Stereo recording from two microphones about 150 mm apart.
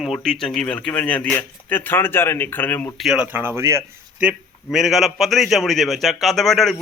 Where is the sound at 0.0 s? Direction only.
Centre (ahead or behind).